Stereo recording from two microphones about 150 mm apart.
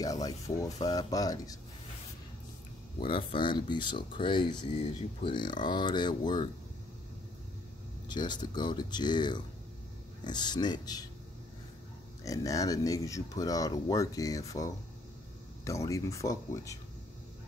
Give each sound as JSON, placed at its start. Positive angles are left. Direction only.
{"t": 0.0, "sound": "speech", "side_deg": 25}
{"t": 3.0, "sound": "speech", "side_deg": 35}
{"t": 8.1, "sound": "speech", "side_deg": 30}
{"t": 12.3, "sound": "speech", "side_deg": 20}